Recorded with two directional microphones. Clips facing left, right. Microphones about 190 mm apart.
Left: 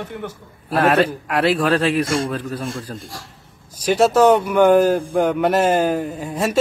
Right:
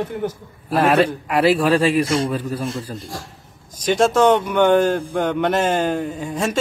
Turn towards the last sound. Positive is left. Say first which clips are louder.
# even
turn(degrees=10)  # may be behind; listen again after turning